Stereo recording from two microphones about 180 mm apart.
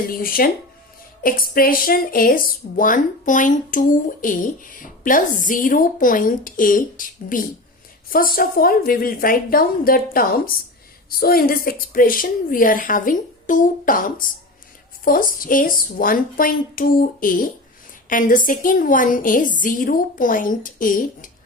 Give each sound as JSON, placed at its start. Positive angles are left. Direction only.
{"t": 0.1, "sound": "speech", "side_deg": 55}